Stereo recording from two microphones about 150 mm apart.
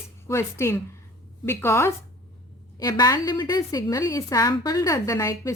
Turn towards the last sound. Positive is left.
turn(degrees=20)  # may be behind; listen again after turning